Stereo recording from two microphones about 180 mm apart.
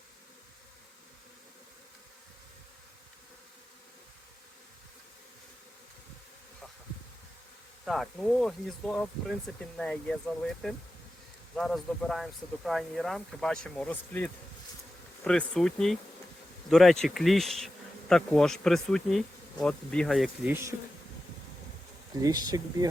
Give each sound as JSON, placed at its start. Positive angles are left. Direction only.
{"t": 7.9, "sound": "speech", "side_deg": 0}
{"t": 11.5, "sound": "speech", "side_deg": 5}
{"t": 22.2, "sound": "speech", "side_deg": -20}